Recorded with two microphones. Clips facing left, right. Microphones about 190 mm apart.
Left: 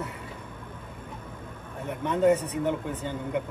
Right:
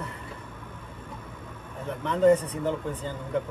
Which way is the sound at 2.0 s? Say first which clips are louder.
Right 2 dB; 10° left (ahead or behind).